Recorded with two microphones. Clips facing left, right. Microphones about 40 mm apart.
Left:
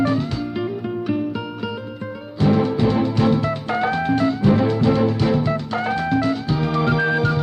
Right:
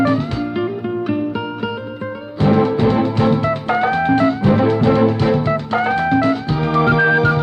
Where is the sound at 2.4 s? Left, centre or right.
Right.